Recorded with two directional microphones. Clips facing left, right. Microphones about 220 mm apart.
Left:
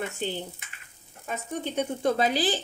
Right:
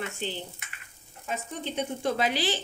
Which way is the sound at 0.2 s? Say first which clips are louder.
Left 3 dB; 50° left (ahead or behind).